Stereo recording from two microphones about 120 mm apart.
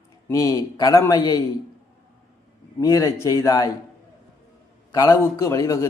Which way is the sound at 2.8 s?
30° left (ahead or behind).